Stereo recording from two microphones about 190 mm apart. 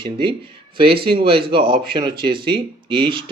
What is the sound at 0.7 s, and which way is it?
Speech, 30° right (ahead or behind).